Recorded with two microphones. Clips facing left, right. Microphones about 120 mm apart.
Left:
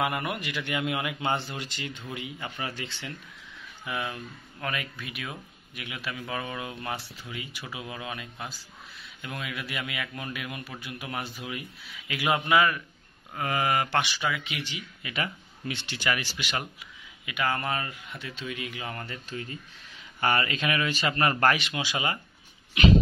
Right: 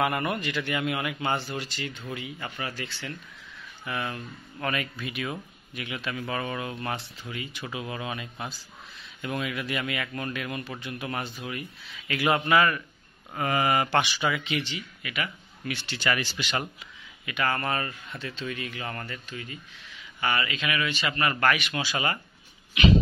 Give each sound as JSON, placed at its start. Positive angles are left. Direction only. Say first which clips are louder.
{"t": 0.0, "sound": "speech", "louder": "right 3 dB", "side_deg": 10}
{"t": 3.8, "sound": "speech", "louder": "right 1 dB", "side_deg": 10}
{"t": 15.0, "sound": "speech", "louder": "left 1 dB", "side_deg": 30}
{"t": 19.2, "sound": "a man's voice", "louder": "left 2 dB", "side_deg": 35}
{"t": 21.7, "sound": "speech", "louder": "right 1 dB", "side_deg": 15}